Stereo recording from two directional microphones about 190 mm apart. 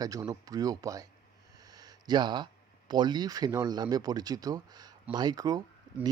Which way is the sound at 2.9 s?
20° right (ahead or behind).